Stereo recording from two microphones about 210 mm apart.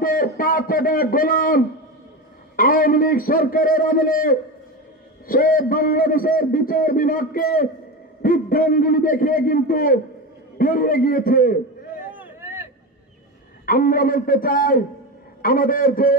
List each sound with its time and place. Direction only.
0.0 s a man's voice: 45° left (ahead or behind)
12.0 s vehicle: 10° right (ahead or behind)
13.7 s a man's voice: 45° left (ahead or behind)